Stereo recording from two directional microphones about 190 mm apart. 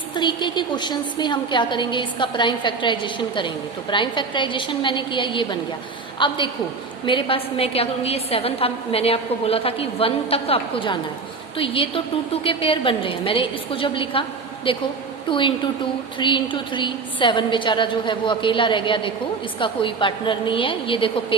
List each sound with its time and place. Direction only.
0.2 s a woman's voice: 25° left (ahead or behind)